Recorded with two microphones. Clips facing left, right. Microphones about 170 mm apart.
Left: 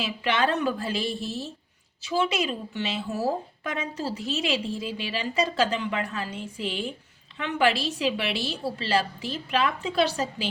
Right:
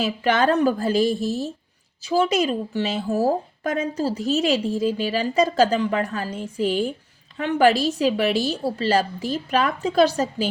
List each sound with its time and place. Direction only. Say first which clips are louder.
0.0 s a woman's voice: right 6 dB; 40° right (ahead or behind)